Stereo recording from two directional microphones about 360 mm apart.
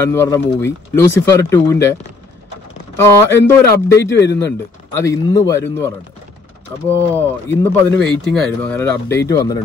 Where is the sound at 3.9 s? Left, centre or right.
Left.